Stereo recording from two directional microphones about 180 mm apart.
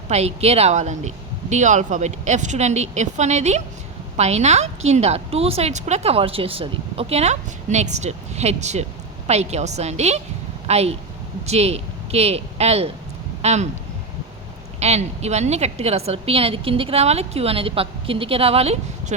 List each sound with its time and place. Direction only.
0.1 s a woman's voice: 35° right (ahead or behind)
14.8 s a woman's voice: 35° right (ahead or behind)